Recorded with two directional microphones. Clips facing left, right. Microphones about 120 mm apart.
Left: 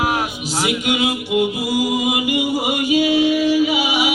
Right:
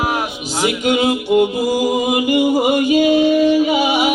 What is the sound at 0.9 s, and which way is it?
Music, 35° right (ahead or behind).